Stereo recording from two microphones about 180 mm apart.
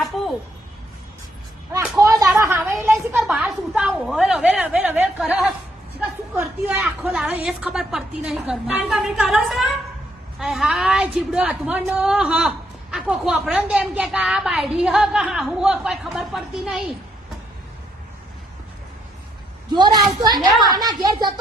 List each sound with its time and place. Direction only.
0.0 s a sound: centre (ahead or behind)
2.0 s speech: 20° right (ahead or behind)
3.2 s a woman's voice: 5° right (ahead or behind)
19.7 s a woman's voice: 25° right (ahead or behind)